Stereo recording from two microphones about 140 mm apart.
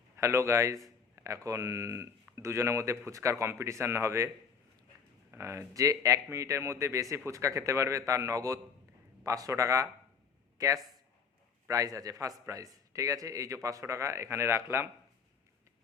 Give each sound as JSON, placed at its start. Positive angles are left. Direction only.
{"t": 0.2, "sound": "a man's voice", "side_deg": -20}
{"t": 5.3, "sound": "a man's voice", "side_deg": -20}